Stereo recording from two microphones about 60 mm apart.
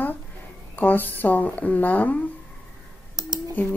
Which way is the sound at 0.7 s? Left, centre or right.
Left.